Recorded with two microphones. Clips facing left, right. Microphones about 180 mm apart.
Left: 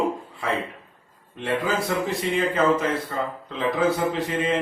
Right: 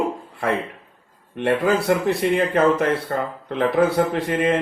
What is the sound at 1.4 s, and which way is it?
Speech, 65° right (ahead or behind).